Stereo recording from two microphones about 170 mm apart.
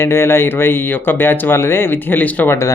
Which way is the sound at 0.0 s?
15° left (ahead or behind).